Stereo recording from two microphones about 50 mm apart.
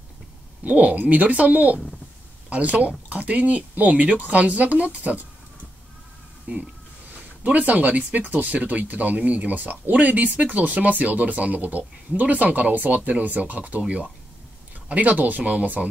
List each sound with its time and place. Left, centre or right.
0.7 s speech: right
6.5 s speech: right